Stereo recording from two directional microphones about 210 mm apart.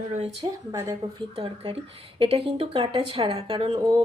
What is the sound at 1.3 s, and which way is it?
Speech, 30° right (ahead or behind).